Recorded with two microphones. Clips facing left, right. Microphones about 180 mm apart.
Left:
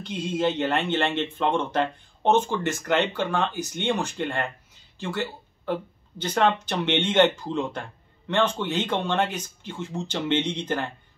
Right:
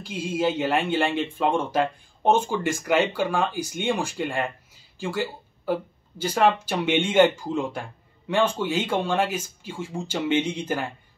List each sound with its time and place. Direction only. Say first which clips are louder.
0.0 s speech: even; 5° right (ahead or behind)